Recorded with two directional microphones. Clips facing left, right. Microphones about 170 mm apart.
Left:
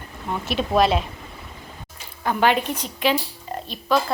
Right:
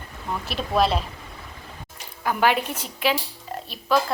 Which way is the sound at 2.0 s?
10° right (ahead or behind).